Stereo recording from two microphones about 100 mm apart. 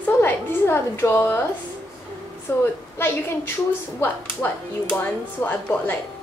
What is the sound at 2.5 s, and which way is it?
A woman's voice, 20° left (ahead or behind).